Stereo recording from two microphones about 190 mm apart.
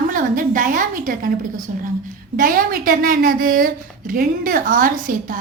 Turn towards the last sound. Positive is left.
turn(degrees=-45)  # may be behind; listen again after turning